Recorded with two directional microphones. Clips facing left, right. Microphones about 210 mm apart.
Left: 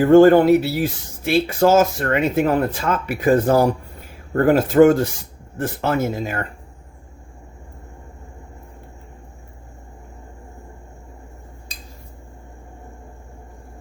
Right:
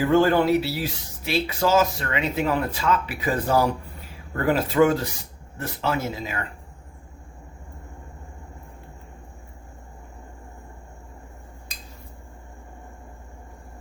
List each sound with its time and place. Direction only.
0.0 s speech: 50° left (ahead or behind)